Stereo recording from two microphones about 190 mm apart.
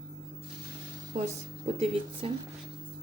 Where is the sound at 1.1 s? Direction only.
35° right (ahead or behind).